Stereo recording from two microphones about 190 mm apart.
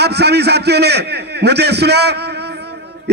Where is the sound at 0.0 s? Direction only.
60° right (ahead or behind).